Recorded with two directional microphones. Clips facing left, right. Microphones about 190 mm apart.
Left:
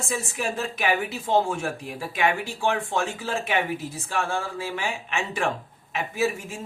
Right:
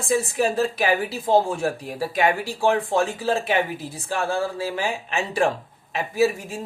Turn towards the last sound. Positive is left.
turn(degrees=-35)  # may be behind; listen again after turning